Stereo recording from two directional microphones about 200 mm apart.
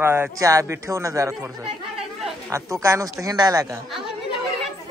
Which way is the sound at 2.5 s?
15° right (ahead or behind).